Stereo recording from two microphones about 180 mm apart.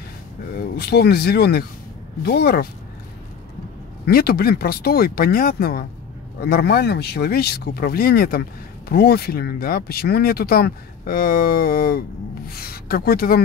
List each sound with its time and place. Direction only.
0.6 s speech: 60° left (ahead or behind)
4.0 s speech: 60° left (ahead or behind)